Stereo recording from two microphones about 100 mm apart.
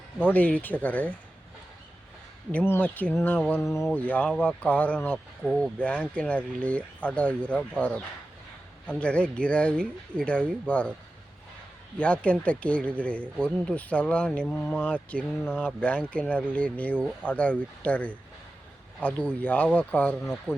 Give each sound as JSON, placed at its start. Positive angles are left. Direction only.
{"t": 0.2, "sound": "speech", "side_deg": 15}
{"t": 2.5, "sound": "speech", "side_deg": 15}
{"t": 3.6, "sound": "speech", "side_deg": 30}
{"t": 3.9, "sound": "speech", "side_deg": 15}
{"t": 5.4, "sound": "speech", "side_deg": -5}
{"t": 5.8, "sound": "speech", "side_deg": 15}
{"t": 11.9, "sound": "speech", "side_deg": 15}